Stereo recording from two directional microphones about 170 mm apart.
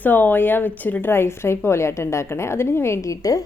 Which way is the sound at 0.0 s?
10° left (ahead or behind).